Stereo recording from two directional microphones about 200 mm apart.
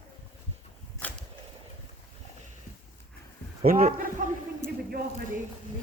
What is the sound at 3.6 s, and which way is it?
Speech, 45° right (ahead or behind).